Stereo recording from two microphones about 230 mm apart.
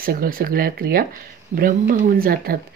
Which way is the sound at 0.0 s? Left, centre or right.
Right.